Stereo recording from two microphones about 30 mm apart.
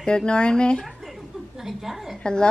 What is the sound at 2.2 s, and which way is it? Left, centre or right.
Speech, left.